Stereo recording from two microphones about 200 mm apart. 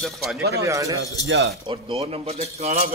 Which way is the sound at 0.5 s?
15° right (ahead or behind).